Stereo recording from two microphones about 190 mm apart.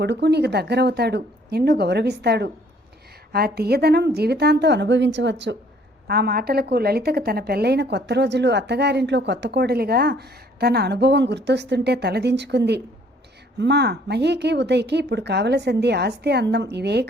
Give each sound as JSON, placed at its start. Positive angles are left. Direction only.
{"t": 0.0, "sound": "a woman's voice", "side_deg": -65}
{"t": 6.1, "sound": "a woman's voice", "side_deg": -55}